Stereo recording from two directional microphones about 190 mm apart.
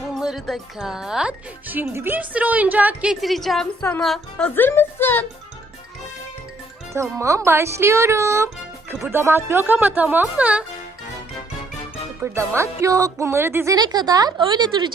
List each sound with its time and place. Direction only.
0.1 s speech: centre (ahead or behind)
6.9 s speech: 15° right (ahead or behind)
12.2 s speech: 15° right (ahead or behind)